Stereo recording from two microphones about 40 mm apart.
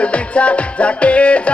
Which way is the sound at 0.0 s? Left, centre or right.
Left.